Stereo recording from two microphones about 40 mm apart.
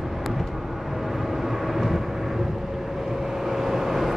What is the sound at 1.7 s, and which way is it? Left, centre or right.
Vehicle, centre.